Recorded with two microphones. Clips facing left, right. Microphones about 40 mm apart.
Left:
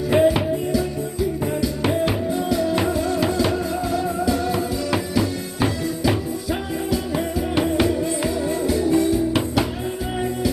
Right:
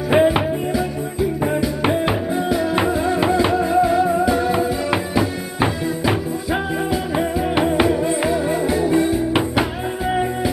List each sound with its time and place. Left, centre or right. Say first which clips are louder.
0.1 s music: right 2 dB; right